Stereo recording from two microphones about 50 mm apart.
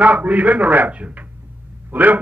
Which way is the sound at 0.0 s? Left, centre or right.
Right.